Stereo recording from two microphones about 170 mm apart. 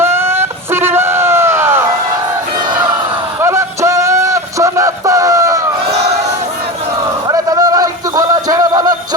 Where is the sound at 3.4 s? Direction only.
15° right (ahead or behind).